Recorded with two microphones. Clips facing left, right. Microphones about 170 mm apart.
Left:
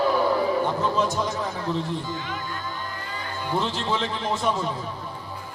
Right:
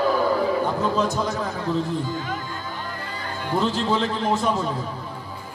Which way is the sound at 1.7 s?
35° right (ahead or behind).